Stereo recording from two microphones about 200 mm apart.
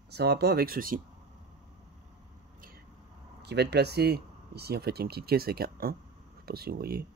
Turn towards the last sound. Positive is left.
turn(degrees=-50)  # may be behind; listen again after turning